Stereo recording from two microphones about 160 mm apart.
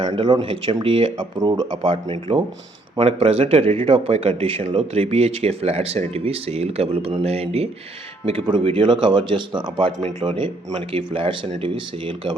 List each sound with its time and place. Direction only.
0.0 s speech: 30° right (ahead or behind)